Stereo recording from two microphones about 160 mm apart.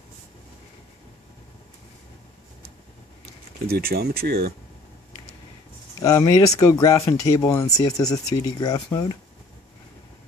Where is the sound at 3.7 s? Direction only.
75° right (ahead or behind).